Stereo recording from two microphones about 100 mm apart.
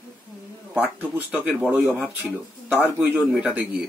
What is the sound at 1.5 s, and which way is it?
Speech, 15° right (ahead or behind).